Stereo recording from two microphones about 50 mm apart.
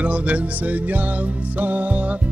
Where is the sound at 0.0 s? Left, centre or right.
Right.